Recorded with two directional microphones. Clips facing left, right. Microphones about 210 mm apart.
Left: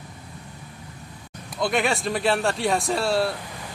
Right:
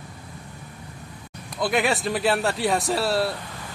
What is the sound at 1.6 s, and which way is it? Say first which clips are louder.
Speech: even; centre (ahead or behind).